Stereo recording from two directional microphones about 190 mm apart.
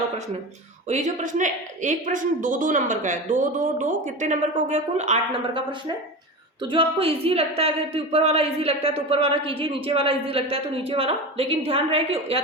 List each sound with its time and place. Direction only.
0.9 s speech: 40° right (ahead or behind)